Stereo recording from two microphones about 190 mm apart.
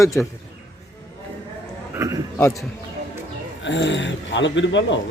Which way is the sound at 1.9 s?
15° right (ahead or behind).